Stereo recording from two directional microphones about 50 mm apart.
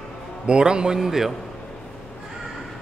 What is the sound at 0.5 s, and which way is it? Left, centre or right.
Speech, centre.